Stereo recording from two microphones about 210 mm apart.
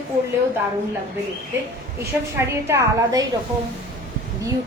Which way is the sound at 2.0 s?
10° right (ahead or behind).